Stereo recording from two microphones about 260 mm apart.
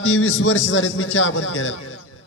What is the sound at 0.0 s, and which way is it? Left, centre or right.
A man's voice, left.